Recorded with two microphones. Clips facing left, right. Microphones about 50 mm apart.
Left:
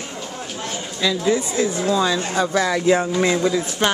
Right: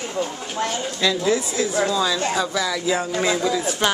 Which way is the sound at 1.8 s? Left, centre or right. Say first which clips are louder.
Left 2 dB; centre.